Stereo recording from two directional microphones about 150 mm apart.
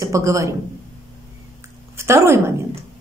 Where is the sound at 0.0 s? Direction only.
20° right (ahead or behind).